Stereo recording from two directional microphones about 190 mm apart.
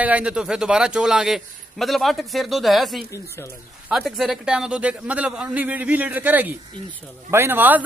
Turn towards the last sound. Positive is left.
turn(degrees=-10)  # may be behind; listen again after turning